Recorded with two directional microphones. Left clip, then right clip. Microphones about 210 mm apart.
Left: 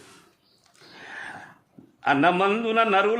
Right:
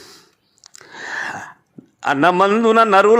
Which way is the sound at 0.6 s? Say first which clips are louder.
Right 12 dB; 25° right (ahead or behind).